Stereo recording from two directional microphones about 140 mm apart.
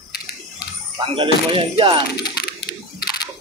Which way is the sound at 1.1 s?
40° right (ahead or behind).